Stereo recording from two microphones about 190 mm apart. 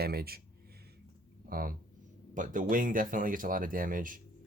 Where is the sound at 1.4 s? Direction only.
50° right (ahead or behind).